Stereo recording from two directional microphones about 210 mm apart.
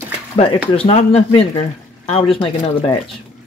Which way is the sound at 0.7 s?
25° left (ahead or behind).